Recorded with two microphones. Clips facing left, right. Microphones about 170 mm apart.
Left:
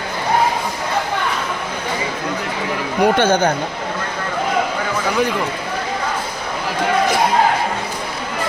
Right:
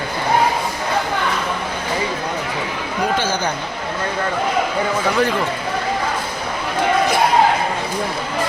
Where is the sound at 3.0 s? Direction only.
60° left (ahead or behind).